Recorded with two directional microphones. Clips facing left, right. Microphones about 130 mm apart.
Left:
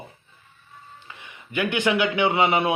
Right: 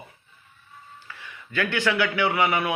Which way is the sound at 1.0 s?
20° left (ahead or behind).